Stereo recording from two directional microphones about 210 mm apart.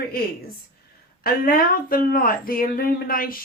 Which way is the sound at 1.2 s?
45° left (ahead or behind).